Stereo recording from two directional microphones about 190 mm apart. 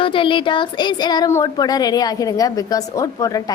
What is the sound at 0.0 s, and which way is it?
Speech, 25° left (ahead or behind).